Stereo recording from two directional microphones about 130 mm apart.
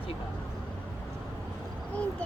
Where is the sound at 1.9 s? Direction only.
10° left (ahead or behind).